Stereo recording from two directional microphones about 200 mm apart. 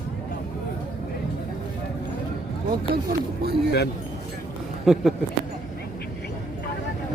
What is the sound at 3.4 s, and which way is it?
Speech, 50° right (ahead or behind).